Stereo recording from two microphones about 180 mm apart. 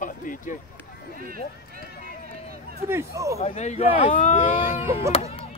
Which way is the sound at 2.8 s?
15° right (ahead or behind).